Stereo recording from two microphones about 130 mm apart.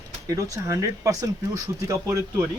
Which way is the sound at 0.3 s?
25° right (ahead or behind).